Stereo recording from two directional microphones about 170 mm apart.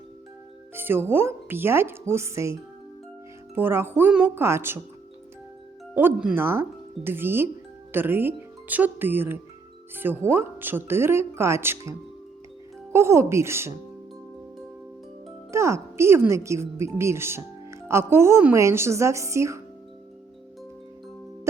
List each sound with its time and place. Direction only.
0.7 s a woman's voice: 10° right (ahead or behind)
5.9 s a woman's voice: 10° right (ahead or behind)
15.5 s a woman's voice: 15° right (ahead or behind)